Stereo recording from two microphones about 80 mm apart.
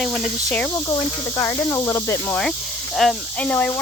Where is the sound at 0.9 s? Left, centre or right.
Left.